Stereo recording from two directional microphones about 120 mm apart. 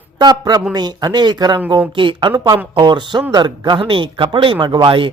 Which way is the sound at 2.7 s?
40° right (ahead or behind).